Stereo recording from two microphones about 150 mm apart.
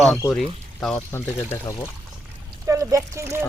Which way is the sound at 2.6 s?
20° right (ahead or behind).